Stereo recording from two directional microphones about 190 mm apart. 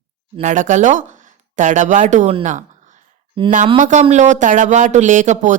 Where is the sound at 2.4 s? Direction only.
40° right (ahead or behind).